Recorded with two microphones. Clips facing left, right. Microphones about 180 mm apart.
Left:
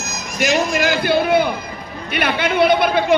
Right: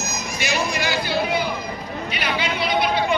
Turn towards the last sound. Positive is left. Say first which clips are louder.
# left 7 dB
turn(degrees=55)  # may be behind; listen again after turning